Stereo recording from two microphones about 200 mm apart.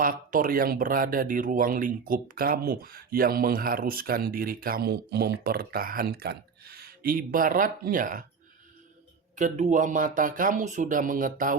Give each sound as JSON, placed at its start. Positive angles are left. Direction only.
{"t": 0.0, "sound": "speech", "side_deg": -45}
{"t": 9.3, "sound": "speech", "side_deg": -40}